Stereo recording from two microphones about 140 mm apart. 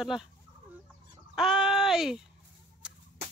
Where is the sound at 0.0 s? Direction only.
5° right (ahead or behind).